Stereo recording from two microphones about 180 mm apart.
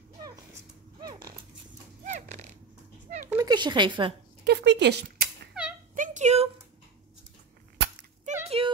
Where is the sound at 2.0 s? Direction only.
40° right (ahead or behind).